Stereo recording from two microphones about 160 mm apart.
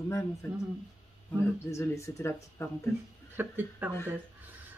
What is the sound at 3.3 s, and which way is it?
Speech, 15° right (ahead or behind).